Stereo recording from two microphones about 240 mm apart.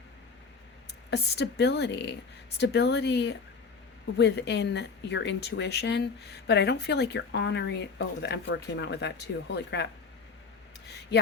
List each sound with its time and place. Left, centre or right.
1.1 s speech: left